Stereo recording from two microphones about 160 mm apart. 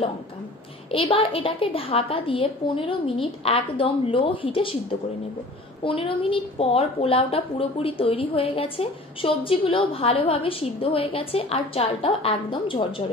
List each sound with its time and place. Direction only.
0.9 s a woman's voice: 35° left (ahead or behind)
5.9 s a woman's voice: 35° left (ahead or behind)